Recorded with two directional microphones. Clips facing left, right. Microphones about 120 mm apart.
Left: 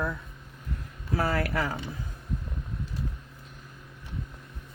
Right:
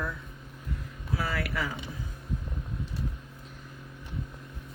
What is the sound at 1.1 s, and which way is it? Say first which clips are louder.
Speech: left 5 dB; 45° left (ahead or behind).